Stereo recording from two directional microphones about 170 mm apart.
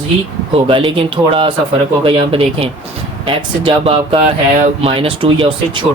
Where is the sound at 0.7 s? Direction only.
30° right (ahead or behind).